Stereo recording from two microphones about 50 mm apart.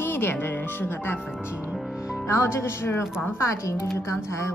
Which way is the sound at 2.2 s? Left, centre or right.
Left.